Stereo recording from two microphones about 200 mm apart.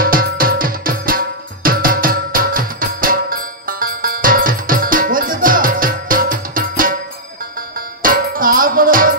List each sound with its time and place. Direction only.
0.0 s music: 45° right (ahead or behind)
8.0 s music: 45° right (ahead or behind)